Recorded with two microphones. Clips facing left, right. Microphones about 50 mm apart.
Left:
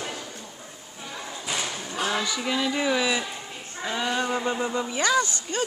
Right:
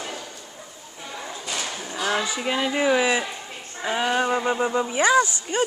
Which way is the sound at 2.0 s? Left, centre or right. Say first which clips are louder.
Right 3 dB; right.